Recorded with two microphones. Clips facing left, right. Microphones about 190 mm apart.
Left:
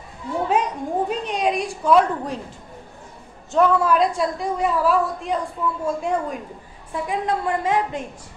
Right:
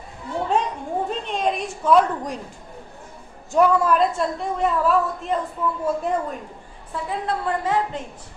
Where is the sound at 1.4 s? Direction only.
Centre (ahead or behind).